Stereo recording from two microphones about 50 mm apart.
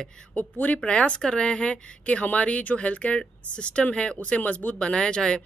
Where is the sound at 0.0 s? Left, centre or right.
Centre.